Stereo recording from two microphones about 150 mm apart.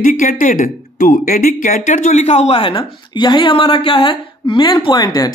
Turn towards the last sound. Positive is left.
turn(degrees=25)  # may be behind; listen again after turning